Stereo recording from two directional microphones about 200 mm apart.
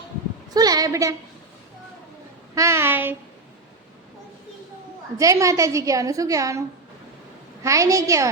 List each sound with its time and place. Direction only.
0.5 s a sound: 20° right (ahead or behind)
2.6 s a woman's voice: 15° right (ahead or behind)
5.1 s a woman's voice: 15° right (ahead or behind)
7.6 s a woman's voice: 15° right (ahead or behind)